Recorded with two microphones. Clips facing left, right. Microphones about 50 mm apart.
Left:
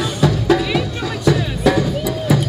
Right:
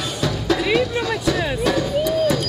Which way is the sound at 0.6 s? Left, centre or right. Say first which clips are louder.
Right 1 dB; centre.